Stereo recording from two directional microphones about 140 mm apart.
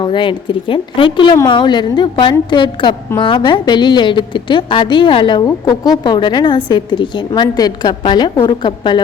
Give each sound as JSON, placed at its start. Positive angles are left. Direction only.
{"t": 0.0, "sound": "a woman's voice", "side_deg": 35}